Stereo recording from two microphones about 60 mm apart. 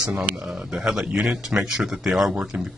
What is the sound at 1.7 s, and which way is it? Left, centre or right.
Speech, centre.